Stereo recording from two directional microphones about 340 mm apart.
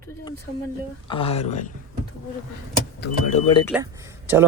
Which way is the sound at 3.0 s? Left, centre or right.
Centre.